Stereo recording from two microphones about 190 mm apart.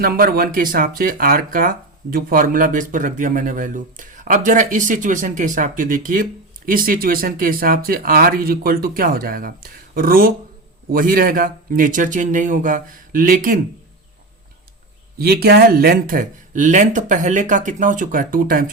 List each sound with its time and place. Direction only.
0.0 s speech: 50° right (ahead or behind)
15.2 s speech: 55° right (ahead or behind)